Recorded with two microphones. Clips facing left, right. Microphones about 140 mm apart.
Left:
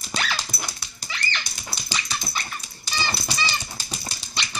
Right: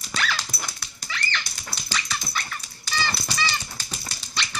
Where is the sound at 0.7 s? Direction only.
20° left (ahead or behind).